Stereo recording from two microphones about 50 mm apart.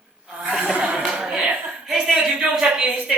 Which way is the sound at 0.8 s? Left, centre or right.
Right.